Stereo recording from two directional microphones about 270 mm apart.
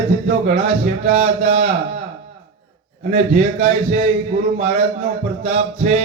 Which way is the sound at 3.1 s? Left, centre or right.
Right.